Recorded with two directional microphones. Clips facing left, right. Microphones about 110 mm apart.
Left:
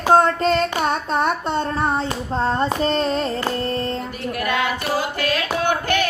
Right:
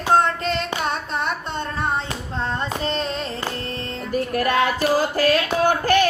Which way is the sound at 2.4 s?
40° left (ahead or behind).